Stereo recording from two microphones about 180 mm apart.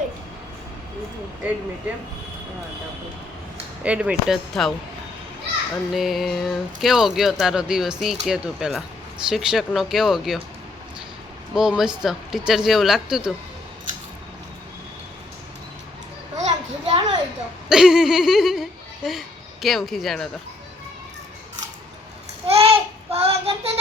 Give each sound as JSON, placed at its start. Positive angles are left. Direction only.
{"t": 3.8, "sound": "speech", "side_deg": -5}
{"t": 5.7, "sound": "speech", "side_deg": 0}
{"t": 11.5, "sound": "speech", "side_deg": -5}
{"t": 16.4, "sound": "a sound", "side_deg": -35}
{"t": 17.7, "sound": "speech", "side_deg": -5}
{"t": 22.4, "sound": "child singing", "side_deg": -35}